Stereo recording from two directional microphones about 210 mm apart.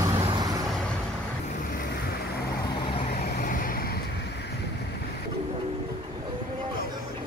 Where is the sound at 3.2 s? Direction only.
40° left (ahead or behind).